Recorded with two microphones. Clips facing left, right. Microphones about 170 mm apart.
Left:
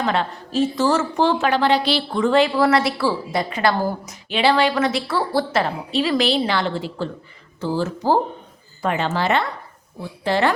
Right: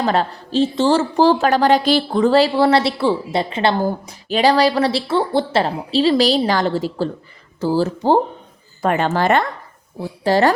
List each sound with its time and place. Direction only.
0.0 s a woman's voice: 35° right (ahead or behind)
8.8 s a woman's voice: 50° right (ahead or behind)